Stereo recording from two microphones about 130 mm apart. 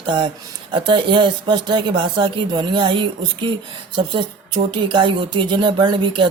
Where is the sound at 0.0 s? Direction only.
35° right (ahead or behind).